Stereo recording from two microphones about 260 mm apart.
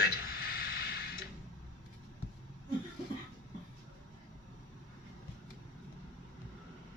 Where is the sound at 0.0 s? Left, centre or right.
Left.